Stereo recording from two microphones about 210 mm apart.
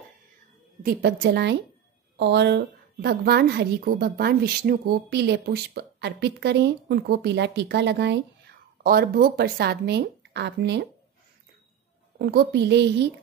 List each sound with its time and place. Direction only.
0.8 s a woman's voice: 50° right (ahead or behind)
12.2 s a woman's voice: 50° right (ahead or behind)